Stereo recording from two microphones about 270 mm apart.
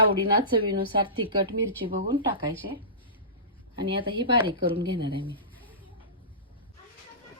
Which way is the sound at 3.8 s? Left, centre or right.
Centre.